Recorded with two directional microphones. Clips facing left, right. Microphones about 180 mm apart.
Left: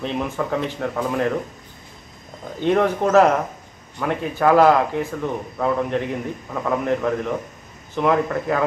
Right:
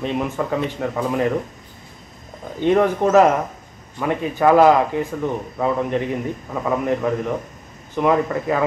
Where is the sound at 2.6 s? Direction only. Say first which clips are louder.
Right 2 dB; 10° right (ahead or behind).